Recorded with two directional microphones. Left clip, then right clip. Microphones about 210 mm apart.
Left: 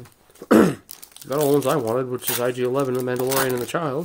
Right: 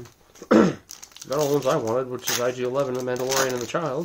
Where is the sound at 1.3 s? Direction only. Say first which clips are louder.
Left 2 dB; 45° left (ahead or behind).